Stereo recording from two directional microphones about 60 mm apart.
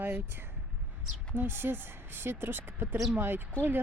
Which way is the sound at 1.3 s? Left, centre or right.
Right.